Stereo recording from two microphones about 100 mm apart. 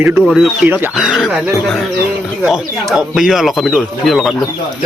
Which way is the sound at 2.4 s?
5° right (ahead or behind).